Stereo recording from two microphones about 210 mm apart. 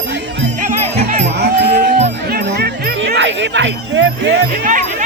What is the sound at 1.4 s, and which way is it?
Music, 50° right (ahead or behind).